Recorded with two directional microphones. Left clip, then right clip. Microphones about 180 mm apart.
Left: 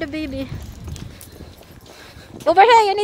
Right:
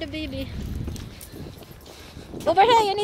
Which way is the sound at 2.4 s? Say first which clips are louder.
Left 6 dB; 55° left (ahead or behind).